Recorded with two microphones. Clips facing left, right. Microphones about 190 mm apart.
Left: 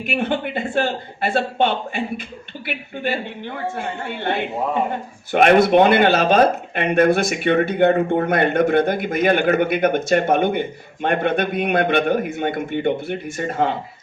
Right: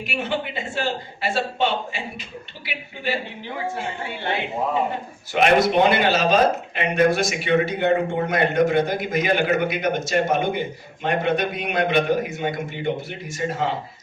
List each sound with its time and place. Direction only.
0.0 s a woman's voice: 55° left (ahead or behind)